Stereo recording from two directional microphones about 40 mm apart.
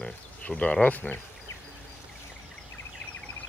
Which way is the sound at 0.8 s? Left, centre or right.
Left.